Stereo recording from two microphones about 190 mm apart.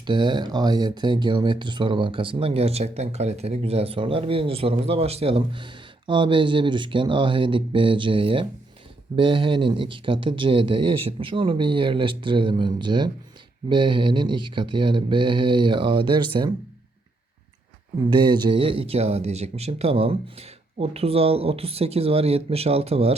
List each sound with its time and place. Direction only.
0.0 s speech: 25° right (ahead or behind)
18.1 s speech: 25° right (ahead or behind)